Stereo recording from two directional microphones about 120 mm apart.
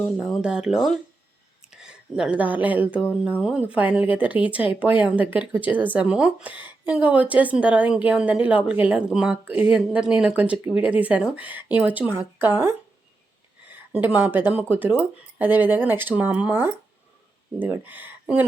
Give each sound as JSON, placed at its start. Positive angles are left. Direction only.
{"t": 0.2, "sound": "speech", "side_deg": -5}
{"t": 13.7, "sound": "speech", "side_deg": -15}